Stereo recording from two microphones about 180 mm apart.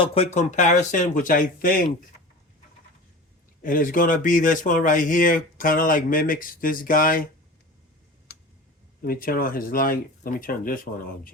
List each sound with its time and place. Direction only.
0.0 s speech: 35° left (ahead or behind); by 1.9 s 50° left (ahead or behind)
3.6 s speech: 50° left (ahead or behind)
8.3 s tick: 65° left (ahead or behind)
9.0 s speech: 55° left (ahead or behind)